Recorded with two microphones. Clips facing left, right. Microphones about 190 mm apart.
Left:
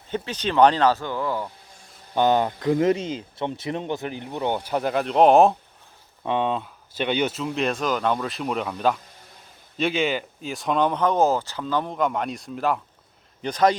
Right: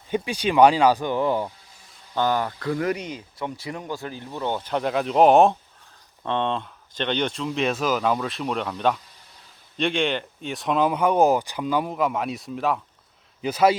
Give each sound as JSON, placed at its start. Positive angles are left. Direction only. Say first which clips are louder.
{"t": 0.1, "sound": "speech", "louder": "right 3 dB", "side_deg": -10}
{"t": 2.1, "sound": "speech", "louder": "left 3 dB", "side_deg": 20}